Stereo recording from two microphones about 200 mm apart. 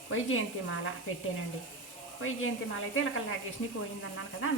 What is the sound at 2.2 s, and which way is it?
Speech, 90° left.